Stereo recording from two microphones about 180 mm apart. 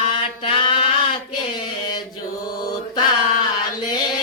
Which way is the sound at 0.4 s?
30° left (ahead or behind).